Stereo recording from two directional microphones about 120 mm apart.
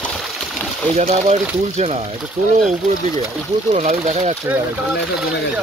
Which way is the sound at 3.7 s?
70° right (ahead or behind).